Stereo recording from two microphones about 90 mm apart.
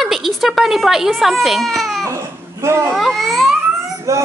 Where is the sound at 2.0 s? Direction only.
35° right (ahead or behind).